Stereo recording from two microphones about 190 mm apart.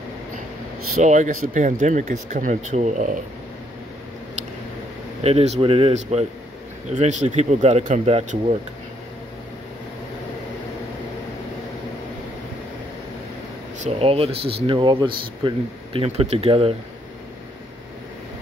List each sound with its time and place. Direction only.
1.0 s speech: 40° right (ahead or behind)
5.2 s speech: 35° right (ahead or behind)
13.8 s speech: 30° right (ahead or behind)